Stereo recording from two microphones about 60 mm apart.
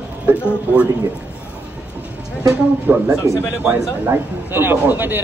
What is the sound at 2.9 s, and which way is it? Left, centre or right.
Speech, right.